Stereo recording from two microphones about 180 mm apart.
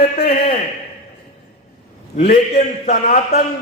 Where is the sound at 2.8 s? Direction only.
50° left (ahead or behind).